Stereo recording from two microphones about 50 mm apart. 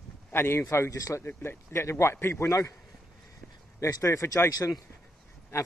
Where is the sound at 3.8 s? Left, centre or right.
Left.